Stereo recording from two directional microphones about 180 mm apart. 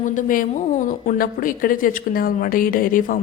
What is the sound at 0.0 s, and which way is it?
Speech, 45° left (ahead or behind).